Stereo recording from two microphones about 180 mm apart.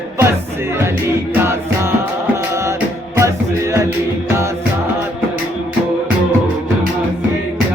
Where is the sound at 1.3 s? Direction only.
15° right (ahead or behind).